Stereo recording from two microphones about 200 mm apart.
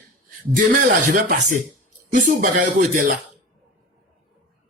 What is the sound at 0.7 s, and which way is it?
Speech, 40° right (ahead or behind).